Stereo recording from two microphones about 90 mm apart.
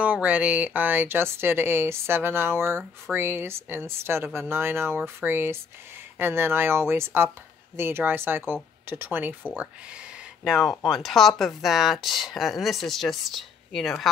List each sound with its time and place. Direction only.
0.0 s speech: 15° right (ahead or behind)
10.4 s speech: centre (ahead or behind)